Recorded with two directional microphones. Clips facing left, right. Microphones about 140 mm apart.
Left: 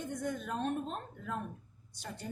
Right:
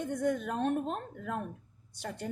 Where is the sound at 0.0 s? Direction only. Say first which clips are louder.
Right 6 dB; 65° right (ahead or behind).